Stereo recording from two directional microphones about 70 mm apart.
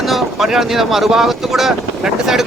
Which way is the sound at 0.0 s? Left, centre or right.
Centre.